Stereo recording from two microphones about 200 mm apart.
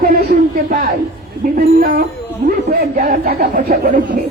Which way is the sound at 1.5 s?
45° right (ahead or behind).